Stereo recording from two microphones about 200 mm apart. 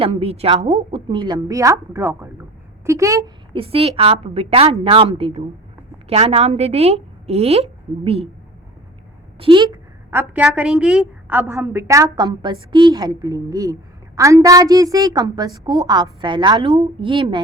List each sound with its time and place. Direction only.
0.0 s a woman's voice: 30° right (ahead or behind)
9.4 s a woman's voice: 25° right (ahead or behind)
10.1 s a woman's voice: 10° right (ahead or behind); by 17.4 s 25° right (ahead or behind)